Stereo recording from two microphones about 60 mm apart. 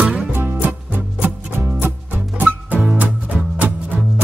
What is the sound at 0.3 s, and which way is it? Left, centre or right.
Music, right.